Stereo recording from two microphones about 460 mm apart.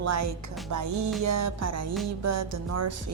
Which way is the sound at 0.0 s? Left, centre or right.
Right.